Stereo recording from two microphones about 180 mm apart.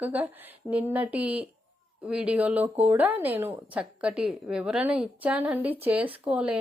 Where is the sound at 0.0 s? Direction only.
10° right (ahead or behind).